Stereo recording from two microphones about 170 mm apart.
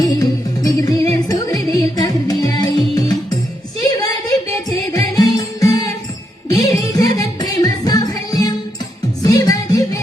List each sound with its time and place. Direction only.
0.0 s music: 20° left (ahead or behind)
3.8 s a sound: 20° left (ahead or behind)
4.9 s music: 20° left (ahead or behind)